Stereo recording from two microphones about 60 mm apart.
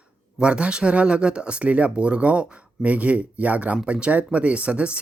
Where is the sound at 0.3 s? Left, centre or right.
Centre.